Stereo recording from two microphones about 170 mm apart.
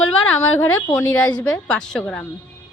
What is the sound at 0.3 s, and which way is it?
A woman's voice, 15° left (ahead or behind).